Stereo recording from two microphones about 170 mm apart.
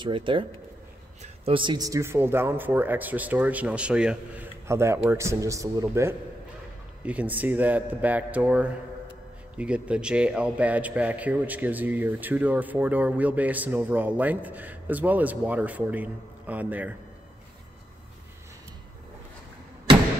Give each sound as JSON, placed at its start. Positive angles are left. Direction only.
{"t": 0.0, "sound": "a man's voice", "side_deg": -30}